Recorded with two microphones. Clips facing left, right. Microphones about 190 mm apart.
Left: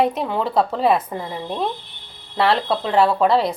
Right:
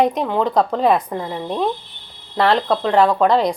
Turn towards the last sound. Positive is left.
turn(degrees=5)  # may be behind; listen again after turning